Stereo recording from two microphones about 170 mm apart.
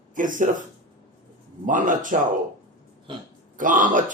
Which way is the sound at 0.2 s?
50° right (ahead or behind).